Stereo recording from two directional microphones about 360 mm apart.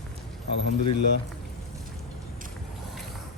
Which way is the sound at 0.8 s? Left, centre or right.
Left.